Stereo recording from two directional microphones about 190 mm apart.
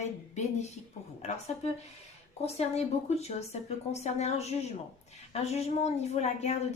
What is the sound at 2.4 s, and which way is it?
Speech, 35° left (ahead or behind).